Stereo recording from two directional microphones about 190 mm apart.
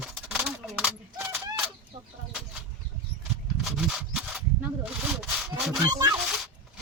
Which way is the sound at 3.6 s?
Centre (ahead or behind).